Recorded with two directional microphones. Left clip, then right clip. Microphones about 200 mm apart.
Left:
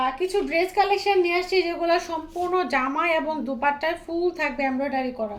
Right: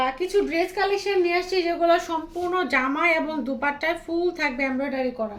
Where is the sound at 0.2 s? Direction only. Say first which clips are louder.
Even; 15° right (ahead or behind).